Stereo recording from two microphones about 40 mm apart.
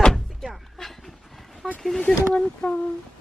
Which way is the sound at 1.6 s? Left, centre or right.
Centre.